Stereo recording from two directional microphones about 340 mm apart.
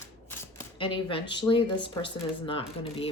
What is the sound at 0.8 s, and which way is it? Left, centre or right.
Speech, centre.